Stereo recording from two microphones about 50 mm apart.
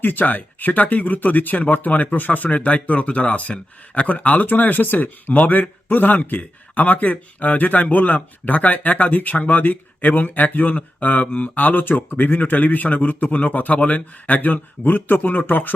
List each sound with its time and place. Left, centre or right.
0.0 s a man's voice: left